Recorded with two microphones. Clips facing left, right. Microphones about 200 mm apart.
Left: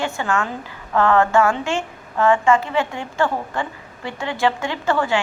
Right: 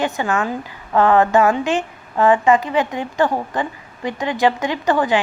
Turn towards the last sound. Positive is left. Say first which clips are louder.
# right 3 dB
turn(degrees=-15)  # may be behind; listen again after turning